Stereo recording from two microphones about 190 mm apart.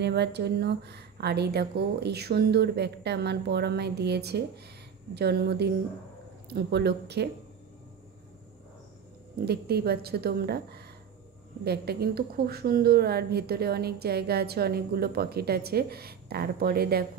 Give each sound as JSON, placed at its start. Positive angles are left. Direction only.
{"t": 0.0, "sound": "a woman's voice", "side_deg": -60}
{"t": 9.4, "sound": "a woman's voice", "side_deg": -60}